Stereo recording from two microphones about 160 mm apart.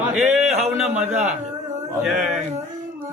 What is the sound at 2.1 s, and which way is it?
Speech, 5° right (ahead or behind).